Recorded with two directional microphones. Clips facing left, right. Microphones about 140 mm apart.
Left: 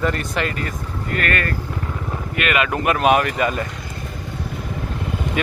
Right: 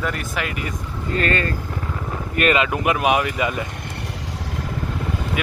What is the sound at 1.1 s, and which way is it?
Speech, 25° right (ahead or behind).